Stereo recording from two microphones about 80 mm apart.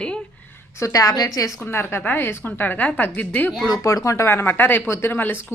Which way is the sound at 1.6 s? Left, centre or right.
Left.